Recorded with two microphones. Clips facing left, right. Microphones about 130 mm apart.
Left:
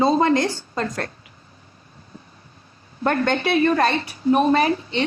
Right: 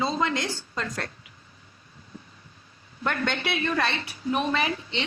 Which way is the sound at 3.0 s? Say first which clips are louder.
Left 8 dB; 40° left (ahead or behind).